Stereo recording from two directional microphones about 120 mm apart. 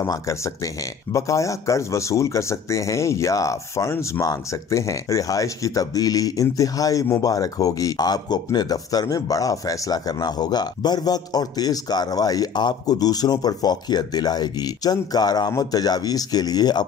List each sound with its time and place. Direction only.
0.0 s speech: 25° left (ahead or behind)